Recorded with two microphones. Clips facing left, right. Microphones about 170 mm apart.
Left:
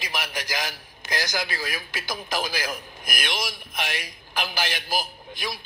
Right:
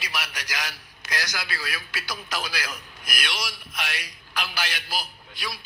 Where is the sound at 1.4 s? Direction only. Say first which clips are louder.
Left 3 dB; 45° left (ahead or behind).